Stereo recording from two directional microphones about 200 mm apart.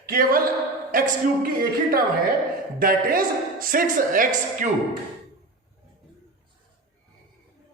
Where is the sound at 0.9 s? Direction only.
45° right (ahead or behind).